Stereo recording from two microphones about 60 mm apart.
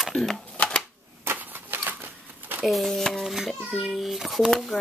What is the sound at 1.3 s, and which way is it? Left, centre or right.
Vehicle, right.